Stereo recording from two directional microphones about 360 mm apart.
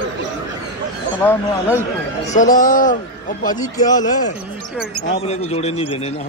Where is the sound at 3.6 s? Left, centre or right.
Centre.